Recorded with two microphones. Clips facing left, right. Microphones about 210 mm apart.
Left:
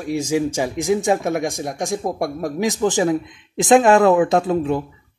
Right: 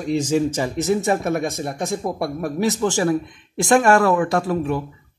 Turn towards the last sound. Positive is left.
turn(degrees=20)  # may be behind; listen again after turning